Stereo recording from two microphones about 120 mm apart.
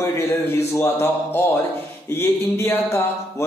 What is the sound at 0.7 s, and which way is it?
Speech, 20° left (ahead or behind).